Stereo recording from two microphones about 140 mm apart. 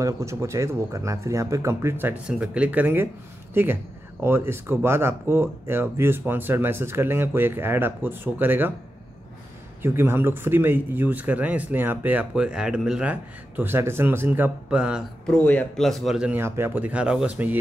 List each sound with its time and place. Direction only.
0.0 s speech: 20° right (ahead or behind)
9.8 s speech: 15° right (ahead or behind)
15.2 s speech: 10° left (ahead or behind); by 17.6 s 10° right (ahead or behind)